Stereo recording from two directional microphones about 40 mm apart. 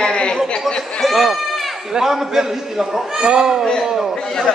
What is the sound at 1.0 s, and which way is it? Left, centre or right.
Run, centre.